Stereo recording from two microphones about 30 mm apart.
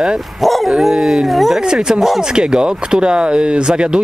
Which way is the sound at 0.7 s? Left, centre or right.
Centre.